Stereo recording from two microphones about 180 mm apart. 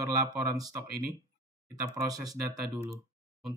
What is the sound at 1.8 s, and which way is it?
Speech, 20° right (ahead or behind).